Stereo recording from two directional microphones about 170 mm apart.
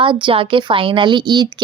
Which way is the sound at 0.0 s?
30° right (ahead or behind).